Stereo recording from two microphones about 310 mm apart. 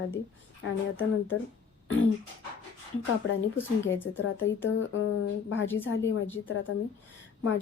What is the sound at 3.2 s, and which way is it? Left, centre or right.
A woman's voice, left.